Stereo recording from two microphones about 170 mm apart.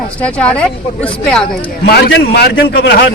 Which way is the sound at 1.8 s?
65° left (ahead or behind).